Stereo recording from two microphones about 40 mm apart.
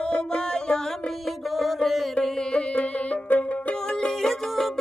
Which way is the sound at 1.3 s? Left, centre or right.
Centre.